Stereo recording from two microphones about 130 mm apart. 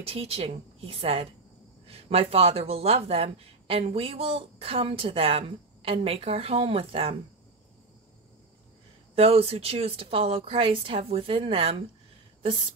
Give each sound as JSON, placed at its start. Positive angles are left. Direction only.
{"t": 0.0, "sound": "speech", "side_deg": -50}
{"t": 9.1, "sound": "speech", "side_deg": -50}